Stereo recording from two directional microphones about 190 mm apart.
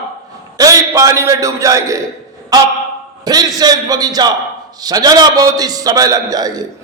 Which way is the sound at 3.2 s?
20° right (ahead or behind).